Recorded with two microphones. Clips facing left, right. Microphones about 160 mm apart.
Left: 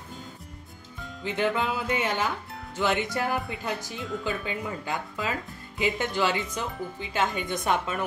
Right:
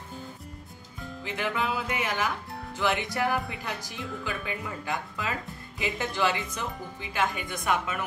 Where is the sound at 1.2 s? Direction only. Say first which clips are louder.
Left 4 dB; 25° left (ahead or behind).